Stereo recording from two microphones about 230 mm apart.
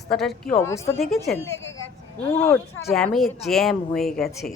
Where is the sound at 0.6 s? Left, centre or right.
Centre.